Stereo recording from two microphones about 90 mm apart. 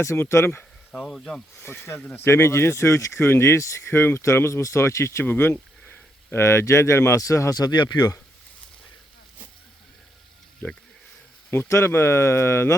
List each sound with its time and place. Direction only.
0.0 s speech: 30° left (ahead or behind)
0.9 s speech: 5° left (ahead or behind)
1.6 s speech: 25° left (ahead or behind); by 8.1 s 50° left (ahead or behind)
10.6 s speech: 20° left (ahead or behind)